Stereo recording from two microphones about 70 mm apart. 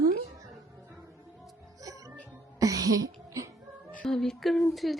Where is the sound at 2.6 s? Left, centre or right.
Right.